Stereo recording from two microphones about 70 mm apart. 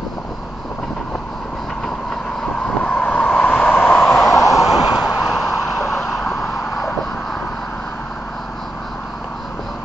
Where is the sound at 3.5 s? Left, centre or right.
Centre.